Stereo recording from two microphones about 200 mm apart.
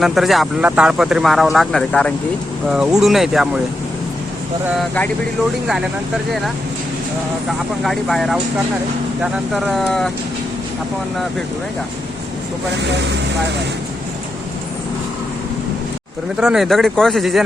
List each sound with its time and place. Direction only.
0.0 s speech: centre (ahead or behind)
4.7 s speech: centre (ahead or behind)
7.9 s speech: centre (ahead or behind)
12.7 s speech: 60° right (ahead or behind)
16.4 s speech: centre (ahead or behind)